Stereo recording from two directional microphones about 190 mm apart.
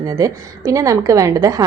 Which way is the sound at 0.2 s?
15° right (ahead or behind).